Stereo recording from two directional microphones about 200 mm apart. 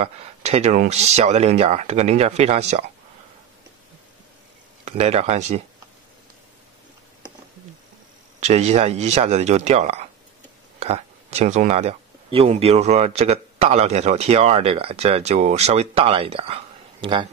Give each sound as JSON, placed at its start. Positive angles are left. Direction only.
{"t": 0.0, "sound": "speech", "side_deg": -30}
{"t": 4.8, "sound": "speech", "side_deg": -35}
{"t": 8.4, "sound": "speech", "side_deg": -35}